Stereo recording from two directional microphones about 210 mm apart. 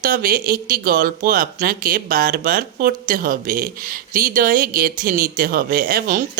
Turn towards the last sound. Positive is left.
turn(degrees=-45)  # may be behind; listen again after turning